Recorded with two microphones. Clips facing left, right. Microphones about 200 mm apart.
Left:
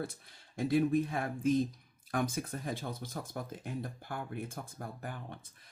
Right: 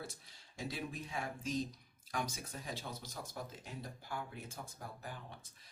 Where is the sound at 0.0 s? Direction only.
55° left (ahead or behind).